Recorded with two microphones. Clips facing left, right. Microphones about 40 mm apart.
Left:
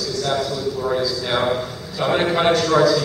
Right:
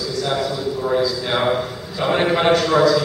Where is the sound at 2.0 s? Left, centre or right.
Centre.